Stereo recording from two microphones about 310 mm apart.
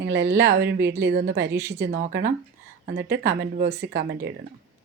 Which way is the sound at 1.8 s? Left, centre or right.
Right.